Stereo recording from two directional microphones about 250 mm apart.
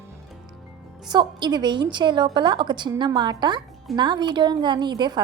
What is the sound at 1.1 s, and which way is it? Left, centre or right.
A woman's voice, centre.